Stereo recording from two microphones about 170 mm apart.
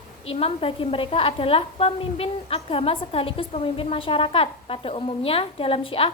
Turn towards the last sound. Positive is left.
turn(degrees=30)  # may be behind; listen again after turning